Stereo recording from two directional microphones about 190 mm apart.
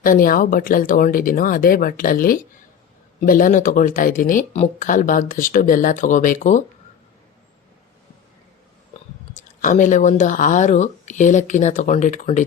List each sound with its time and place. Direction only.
0.0 s speech: 50° left (ahead or behind)
9.3 s speech: 40° left (ahead or behind)